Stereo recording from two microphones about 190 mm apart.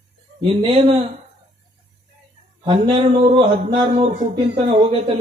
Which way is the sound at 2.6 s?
25° right (ahead or behind).